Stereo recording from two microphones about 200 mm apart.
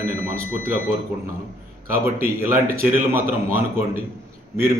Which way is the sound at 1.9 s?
10° right (ahead or behind).